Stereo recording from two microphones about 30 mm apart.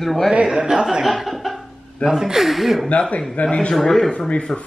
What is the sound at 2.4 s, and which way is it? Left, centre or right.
Speech, centre.